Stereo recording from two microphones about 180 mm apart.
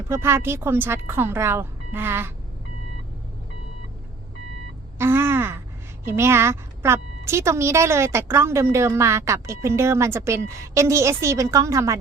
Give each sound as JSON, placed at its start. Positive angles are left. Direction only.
{"t": 0.1, "sound": "speech", "side_deg": -15}
{"t": 4.9, "sound": "a sound", "side_deg": -15}
{"t": 6.1, "sound": "speech", "side_deg": -15}